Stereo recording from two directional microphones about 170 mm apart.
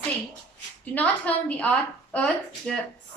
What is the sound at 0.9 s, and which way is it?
A woman's voice, 10° left (ahead or behind).